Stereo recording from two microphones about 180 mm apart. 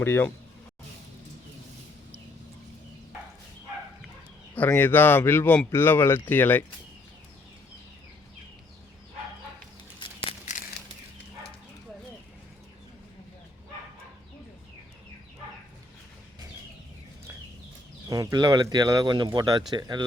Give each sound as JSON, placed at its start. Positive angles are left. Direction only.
{"t": 0.0, "sound": "speech", "side_deg": 10}
{"t": 4.5, "sound": "speech", "side_deg": 10}
{"t": 10.0, "sound": "a sound", "side_deg": 30}
{"t": 18.1, "sound": "speech", "side_deg": -20}